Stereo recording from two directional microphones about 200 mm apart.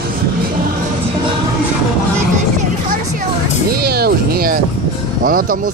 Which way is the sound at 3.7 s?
50° right (ahead or behind).